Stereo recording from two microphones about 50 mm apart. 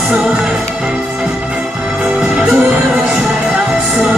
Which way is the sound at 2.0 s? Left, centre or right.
Right.